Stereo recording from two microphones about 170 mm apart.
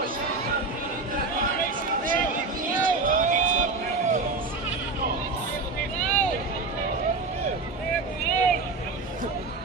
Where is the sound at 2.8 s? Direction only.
50° right (ahead or behind).